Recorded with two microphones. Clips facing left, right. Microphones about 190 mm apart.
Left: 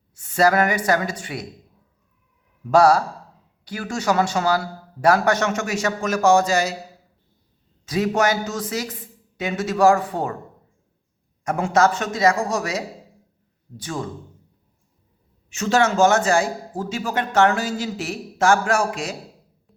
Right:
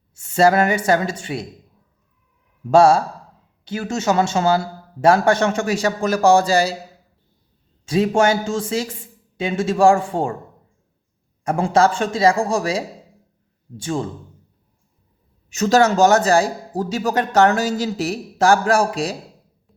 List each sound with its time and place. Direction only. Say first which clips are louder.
0.1 s speech: right 3 dB; 25° right (ahead or behind)
2.6 s speech: right 2 dB; 25° right (ahead or behind)
7.9 s speech: right 4 dB; 30° right (ahead or behind)
11.4 s speech: right 2 dB; 30° right (ahead or behind)
15.4 s speech: right 4 dB; 40° right (ahead or behind)